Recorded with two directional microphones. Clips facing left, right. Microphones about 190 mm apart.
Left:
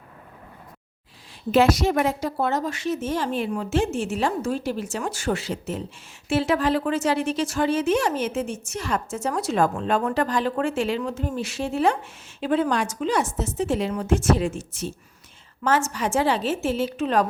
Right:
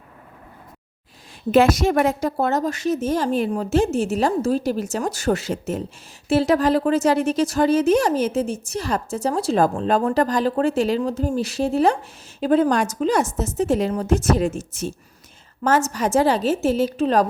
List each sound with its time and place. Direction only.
1.5 s a woman's voice: 50° right (ahead or behind)